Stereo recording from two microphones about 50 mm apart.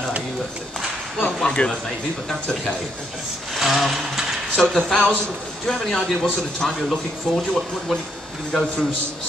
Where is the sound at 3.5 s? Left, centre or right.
Centre.